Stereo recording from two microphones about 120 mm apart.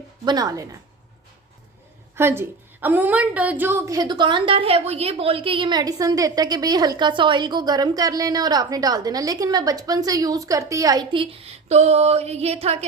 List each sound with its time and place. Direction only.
0.3 s speech: 30° right (ahead or behind)
2.1 s a woman's voice: 20° right (ahead or behind)
11.1 s a woman's voice: 45° right (ahead or behind)
11.7 s a sound: 65° right (ahead or behind)